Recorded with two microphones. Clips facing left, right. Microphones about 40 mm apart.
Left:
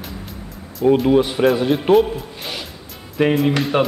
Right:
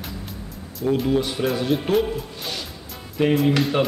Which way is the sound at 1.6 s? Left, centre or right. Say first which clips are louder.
Left 6 dB; centre.